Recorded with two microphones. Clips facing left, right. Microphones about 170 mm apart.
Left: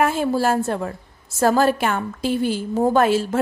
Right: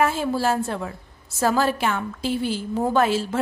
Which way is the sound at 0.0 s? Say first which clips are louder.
Left 2 dB; 55° left (ahead or behind).